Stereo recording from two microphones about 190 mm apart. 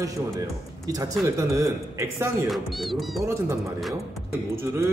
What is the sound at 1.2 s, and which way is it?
Speech, 15° right (ahead or behind).